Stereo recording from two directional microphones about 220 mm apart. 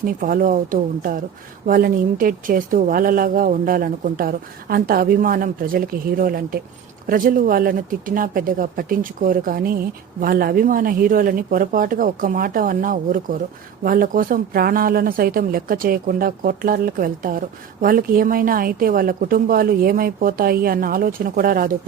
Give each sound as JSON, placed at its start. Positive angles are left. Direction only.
{"t": 0.0, "sound": "speech", "side_deg": -40}